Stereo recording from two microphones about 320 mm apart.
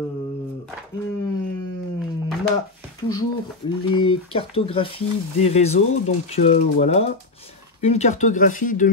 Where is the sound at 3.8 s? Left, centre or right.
Centre.